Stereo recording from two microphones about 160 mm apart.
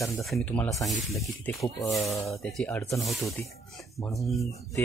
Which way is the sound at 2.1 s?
20° left (ahead or behind).